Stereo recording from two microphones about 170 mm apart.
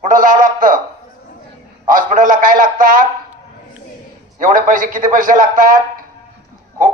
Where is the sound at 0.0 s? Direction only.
50° right (ahead or behind).